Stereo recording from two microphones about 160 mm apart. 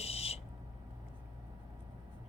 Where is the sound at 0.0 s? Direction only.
40° left (ahead or behind).